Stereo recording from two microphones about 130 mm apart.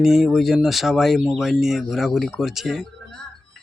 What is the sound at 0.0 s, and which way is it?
Speech, centre (ahead or behind).